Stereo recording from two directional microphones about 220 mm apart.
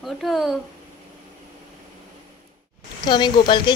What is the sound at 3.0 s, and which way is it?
Speech, 20° left (ahead or behind).